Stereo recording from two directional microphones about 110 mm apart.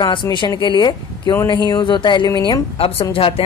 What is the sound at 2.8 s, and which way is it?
Speech, 55° left (ahead or behind).